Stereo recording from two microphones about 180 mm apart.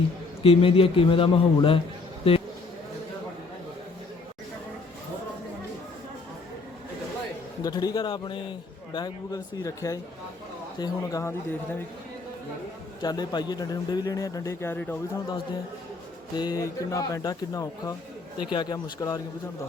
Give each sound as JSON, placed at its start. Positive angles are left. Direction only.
{"t": 0.4, "sound": "a man's voice", "side_deg": 30}
{"t": 7.6, "sound": "a man's voice", "side_deg": 20}
{"t": 13.0, "sound": "a man's voice", "side_deg": 20}
{"t": 16.3, "sound": "a man's voice", "side_deg": 20}